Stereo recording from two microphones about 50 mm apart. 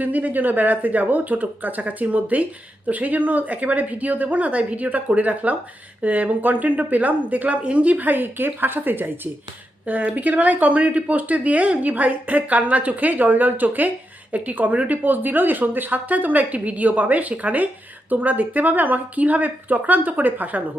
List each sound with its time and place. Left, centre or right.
0.0 s speech: right
9.8 s speech: right